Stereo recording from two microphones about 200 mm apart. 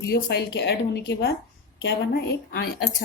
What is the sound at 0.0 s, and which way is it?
A woman's voice, 55° left (ahead or behind).